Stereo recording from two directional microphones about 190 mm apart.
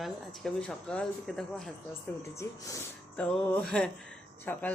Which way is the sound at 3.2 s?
5° left (ahead or behind).